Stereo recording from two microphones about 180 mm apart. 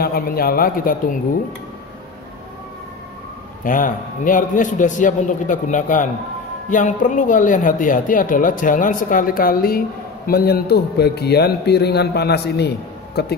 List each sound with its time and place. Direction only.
0.0 s a man's voice: 55° left (ahead or behind)
3.6 s a man's voice: 50° left (ahead or behind); by 13.2 s 65° left (ahead or behind)